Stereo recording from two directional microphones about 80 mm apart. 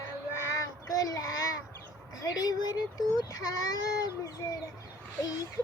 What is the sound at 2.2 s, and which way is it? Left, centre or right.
Child singing, left.